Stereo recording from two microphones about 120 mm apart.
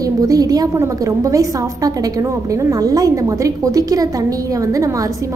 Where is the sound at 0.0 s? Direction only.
30° right (ahead or behind).